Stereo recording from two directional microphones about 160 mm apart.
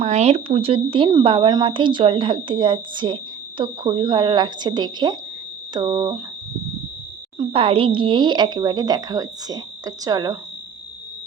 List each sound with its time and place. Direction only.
0.0 s speech: 45° right (ahead or behind); by 6.2 s 25° right (ahead or behind)
7.3 s speech: 35° right (ahead or behind)